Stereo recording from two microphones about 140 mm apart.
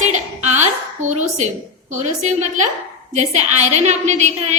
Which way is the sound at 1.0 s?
60° right (ahead or behind).